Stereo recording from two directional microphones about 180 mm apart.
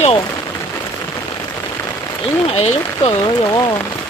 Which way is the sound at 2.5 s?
40° left (ahead or behind).